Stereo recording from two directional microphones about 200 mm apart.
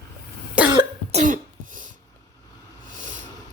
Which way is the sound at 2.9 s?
40° right (ahead or behind).